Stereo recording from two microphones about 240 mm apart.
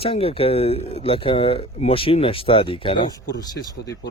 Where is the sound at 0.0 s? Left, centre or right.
Left.